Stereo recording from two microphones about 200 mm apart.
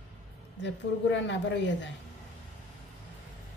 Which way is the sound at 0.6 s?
60° left (ahead or behind).